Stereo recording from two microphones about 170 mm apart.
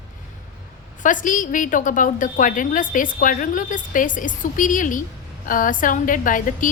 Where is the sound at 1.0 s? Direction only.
50° left (ahead or behind).